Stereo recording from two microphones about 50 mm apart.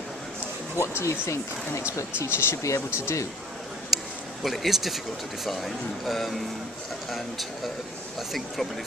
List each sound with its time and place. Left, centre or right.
0.7 s speech: left
3.9 s speech: centre